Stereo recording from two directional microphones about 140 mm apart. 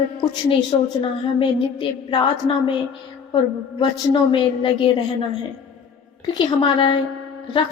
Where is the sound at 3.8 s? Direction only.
40° left (ahead or behind).